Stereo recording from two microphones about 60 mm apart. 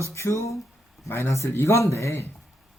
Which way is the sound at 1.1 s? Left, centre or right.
Left.